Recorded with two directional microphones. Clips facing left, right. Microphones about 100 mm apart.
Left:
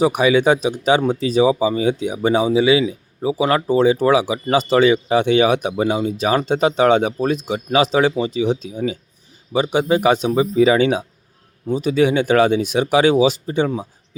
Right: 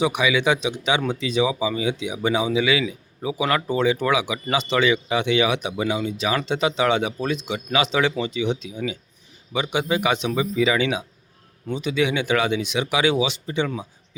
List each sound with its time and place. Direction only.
0.0 s speech: 40° left (ahead or behind)